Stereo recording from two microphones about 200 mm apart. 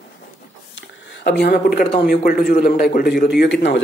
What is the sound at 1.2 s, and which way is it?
A man's voice, 55° left (ahead or behind).